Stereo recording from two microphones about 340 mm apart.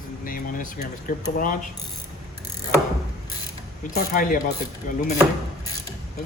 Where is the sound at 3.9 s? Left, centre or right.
Left.